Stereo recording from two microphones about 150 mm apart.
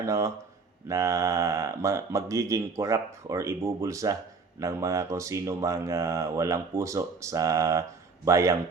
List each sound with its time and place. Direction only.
0.0 s speech: 20° right (ahead or behind)